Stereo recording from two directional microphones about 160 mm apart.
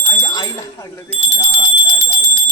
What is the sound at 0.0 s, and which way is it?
Bicycle bell, 20° left (ahead or behind).